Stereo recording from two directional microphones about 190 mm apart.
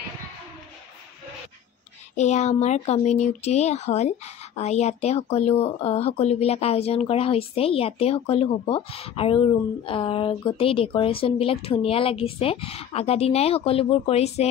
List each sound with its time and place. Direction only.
2.1 s speech: 35° left (ahead or behind)